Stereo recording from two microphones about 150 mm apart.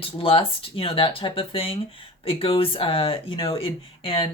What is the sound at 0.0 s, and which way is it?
Speech, 40° left (ahead or behind).